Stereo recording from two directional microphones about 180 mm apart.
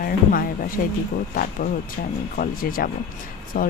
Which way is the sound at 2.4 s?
50° left (ahead or behind).